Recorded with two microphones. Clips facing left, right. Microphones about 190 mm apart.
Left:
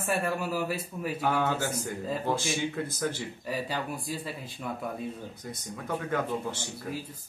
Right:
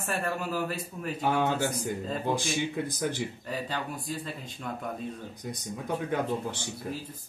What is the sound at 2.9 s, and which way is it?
Speech, 15° right (ahead or behind).